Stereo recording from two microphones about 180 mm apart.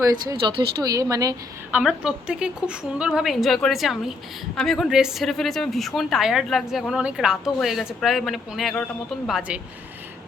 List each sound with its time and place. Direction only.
0.0 s speech: 20° right (ahead or behind)
1.7 s a woman's voice: 5° right (ahead or behind)